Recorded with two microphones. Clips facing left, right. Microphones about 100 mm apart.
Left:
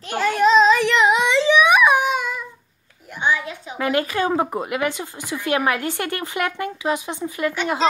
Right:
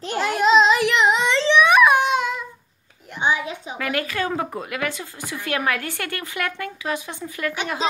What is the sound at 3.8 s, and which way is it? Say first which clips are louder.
A woman's voice: left 5 dB; 25° left (ahead or behind).